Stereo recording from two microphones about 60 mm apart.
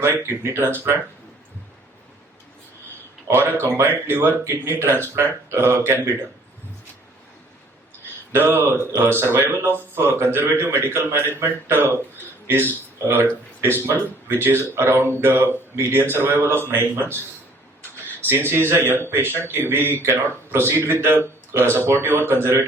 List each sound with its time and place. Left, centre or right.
0.0 s speech: right
3.3 s speech: right
8.3 s speech: right
18.3 s speech: right